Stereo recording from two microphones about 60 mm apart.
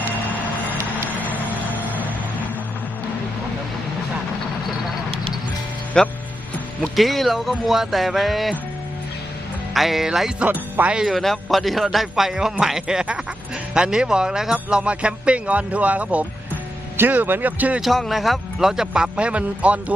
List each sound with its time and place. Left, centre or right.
6.0 s speech: centre
6.9 s a man's voice: centre
9.7 s a man's voice: centre
10.4 s speech: right
11.1 s a man's voice: centre; by 17.7 s right
17.7 s a man's voice: centre; by 19.8 s right